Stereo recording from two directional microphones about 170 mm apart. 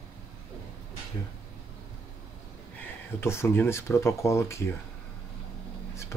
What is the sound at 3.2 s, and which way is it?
Speech, 15° left (ahead or behind).